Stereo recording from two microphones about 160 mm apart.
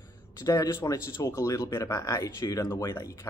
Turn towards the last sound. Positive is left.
turn(degrees=20)  # may be behind; listen again after turning